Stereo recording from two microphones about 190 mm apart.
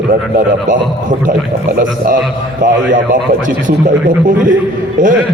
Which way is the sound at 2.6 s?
45° right (ahead or behind).